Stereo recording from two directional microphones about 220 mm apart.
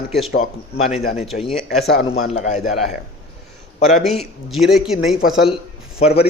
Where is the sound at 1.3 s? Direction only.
45° left (ahead or behind).